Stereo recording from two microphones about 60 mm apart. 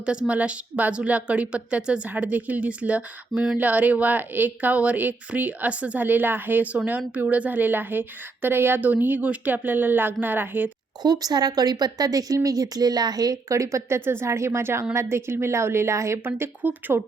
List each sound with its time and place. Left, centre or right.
0.0 s a woman's voice: centre; by 10.7 s right
11.1 s speech: right
14.0 s a woman's voice: right
16.6 s a woman's voice: right